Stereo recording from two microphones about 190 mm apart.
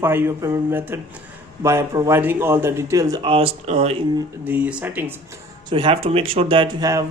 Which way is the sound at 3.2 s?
30° right (ahead or behind).